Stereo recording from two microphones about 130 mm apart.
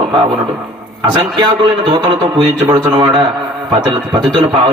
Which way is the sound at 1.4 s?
40° right (ahead or behind).